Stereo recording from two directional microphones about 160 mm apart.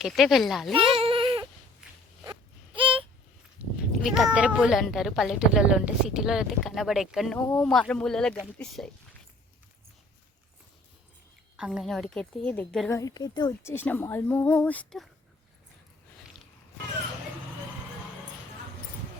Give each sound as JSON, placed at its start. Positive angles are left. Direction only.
{"t": 0.0, "sound": "a woman's voice", "side_deg": 0}
{"t": 0.7, "sound": "goat", "side_deg": -35}
{"t": 2.7, "sound": "a sound", "side_deg": -35}
{"t": 4.0, "sound": "a woman's voice", "side_deg": -5}
{"t": 11.5, "sound": "a woman's voice", "side_deg": -5}
{"t": 12.9, "sound": "speech", "side_deg": 20}